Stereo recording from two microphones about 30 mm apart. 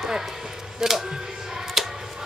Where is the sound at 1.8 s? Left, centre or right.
Centre.